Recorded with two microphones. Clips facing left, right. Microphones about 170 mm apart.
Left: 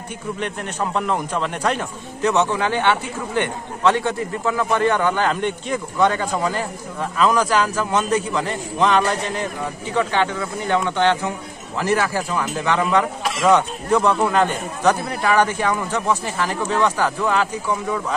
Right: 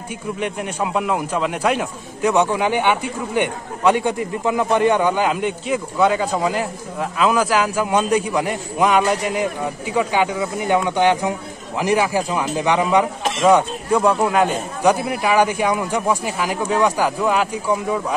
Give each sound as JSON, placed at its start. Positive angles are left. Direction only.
{"t": 0.4, "sound": "a man's voice", "side_deg": -10}
{"t": 13.5, "sound": "a man's voice", "side_deg": -10}